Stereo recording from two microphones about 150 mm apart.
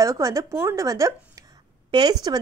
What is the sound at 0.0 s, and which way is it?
A woman's voice, 20° right (ahead or behind).